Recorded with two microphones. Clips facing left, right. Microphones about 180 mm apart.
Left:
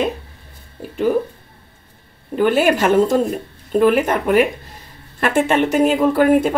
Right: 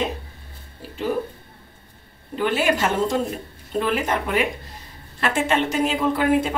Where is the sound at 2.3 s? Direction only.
50° left (ahead or behind).